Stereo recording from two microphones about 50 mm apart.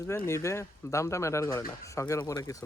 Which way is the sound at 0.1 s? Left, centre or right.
Left.